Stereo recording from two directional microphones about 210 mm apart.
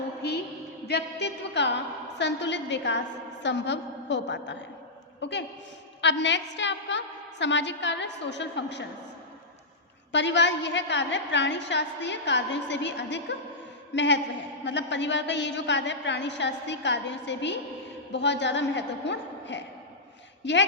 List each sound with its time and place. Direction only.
0.2 s a sound: 50° left (ahead or behind)
0.9 s a woman's voice: 55° left (ahead or behind)
10.1 s a woman's voice: 55° left (ahead or behind)